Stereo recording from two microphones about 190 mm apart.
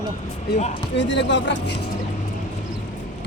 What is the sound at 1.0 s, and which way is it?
Speech, 70° left (ahead or behind).